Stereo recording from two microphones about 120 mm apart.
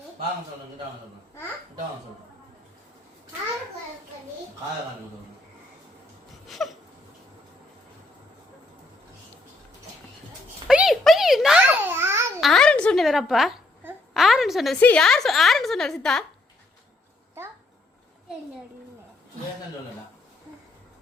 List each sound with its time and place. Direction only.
6.5 s a sound: centre (ahead or behind)
10.7 s a sound: 5° right (ahead or behind)
11.6 s babbling: 15° right (ahead or behind)
12.4 s babbling: 5° left (ahead or behind)
13.1 s a woman's voice: 5° right (ahead or behind)
14.8 s a woman's voice: 15° left (ahead or behind)
15.0 s a woman's voice: 5° left (ahead or behind)